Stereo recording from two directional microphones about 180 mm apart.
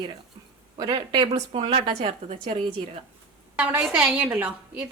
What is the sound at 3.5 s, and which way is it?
A woman's voice, 10° right (ahead or behind).